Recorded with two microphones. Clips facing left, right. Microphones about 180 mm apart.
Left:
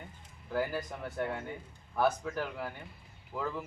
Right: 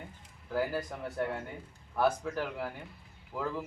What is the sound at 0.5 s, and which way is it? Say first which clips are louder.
Speech: right 1 dB; centre (ahead or behind).